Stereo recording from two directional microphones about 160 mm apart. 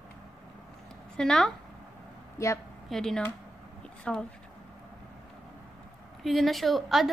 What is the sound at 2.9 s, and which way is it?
A woman's voice, 5° left (ahead or behind).